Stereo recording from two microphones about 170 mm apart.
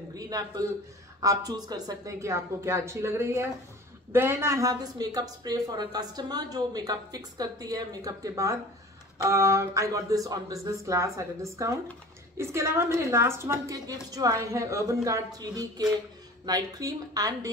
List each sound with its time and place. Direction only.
0.1 s a man's voice: 20° right (ahead or behind)